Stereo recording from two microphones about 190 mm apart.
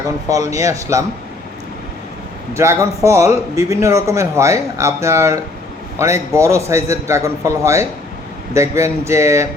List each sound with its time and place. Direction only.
0.3 s a man's voice: 15° right (ahead or behind)
2.5 s a man's voice: 15° right (ahead or behind)